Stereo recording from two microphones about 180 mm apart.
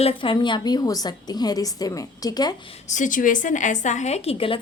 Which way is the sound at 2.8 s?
45° left (ahead or behind).